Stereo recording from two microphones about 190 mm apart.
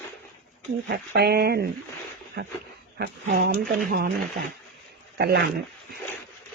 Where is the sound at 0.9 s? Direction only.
60° right (ahead or behind).